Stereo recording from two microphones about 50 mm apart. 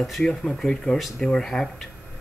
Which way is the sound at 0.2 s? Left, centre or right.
Centre.